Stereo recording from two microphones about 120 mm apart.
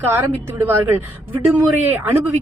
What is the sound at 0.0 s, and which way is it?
Speech, 15° right (ahead or behind).